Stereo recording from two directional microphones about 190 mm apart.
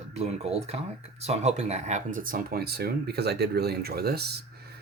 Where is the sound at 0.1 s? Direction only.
35° right (ahead or behind); by 4.4 s 55° right (ahead or behind).